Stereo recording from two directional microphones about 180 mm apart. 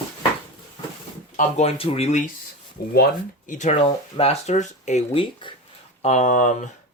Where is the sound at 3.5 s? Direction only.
40° left (ahead or behind).